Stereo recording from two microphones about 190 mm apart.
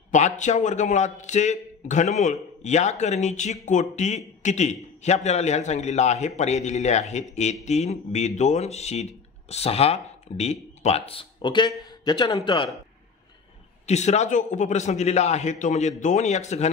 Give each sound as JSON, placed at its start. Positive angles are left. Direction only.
{"t": 0.1, "sound": "a man's voice", "side_deg": 40}
{"t": 13.8, "sound": "speech", "side_deg": 35}